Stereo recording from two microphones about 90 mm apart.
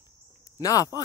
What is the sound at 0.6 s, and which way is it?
Speech, 40° left (ahead or behind).